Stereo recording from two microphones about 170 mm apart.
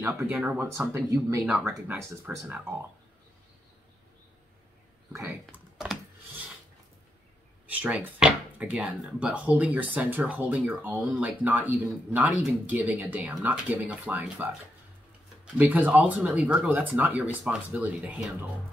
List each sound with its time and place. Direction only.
0.0 s speech: 10° right (ahead or behind)
1.4 s speech: centre (ahead or behind)
1.7 s speech: 15° right (ahead or behind)
5.1 s typing: 10° right (ahead or behind)
7.6 s speech: 10° right (ahead or behind)
15.5 s speech: 10° right (ahead or behind)